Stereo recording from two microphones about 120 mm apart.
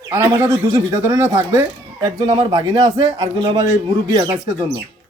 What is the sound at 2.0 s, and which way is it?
Speech, 35° right (ahead or behind).